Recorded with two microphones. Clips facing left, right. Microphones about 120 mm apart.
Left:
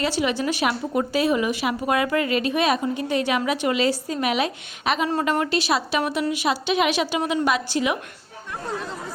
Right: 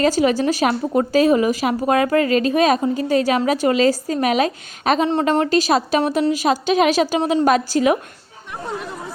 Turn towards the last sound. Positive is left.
turn(degrees=-40)  # may be behind; listen again after turning